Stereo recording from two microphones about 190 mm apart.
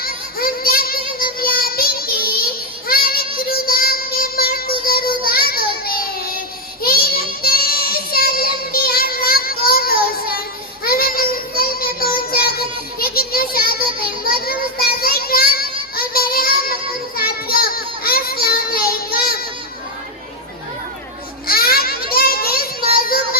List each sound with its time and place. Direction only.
0.0 s child singing: 50° left (ahead or behind)
21.4 s a sound: 50° left (ahead or behind)
22.9 s music: 50° left (ahead or behind)